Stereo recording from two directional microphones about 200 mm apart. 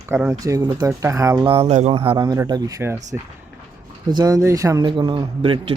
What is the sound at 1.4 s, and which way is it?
Speech, 30° right (ahead or behind).